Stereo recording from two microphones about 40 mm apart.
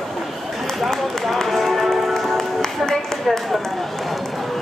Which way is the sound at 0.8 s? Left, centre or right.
Centre.